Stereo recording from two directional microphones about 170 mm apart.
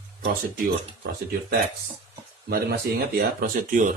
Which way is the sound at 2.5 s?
60° right (ahead or behind).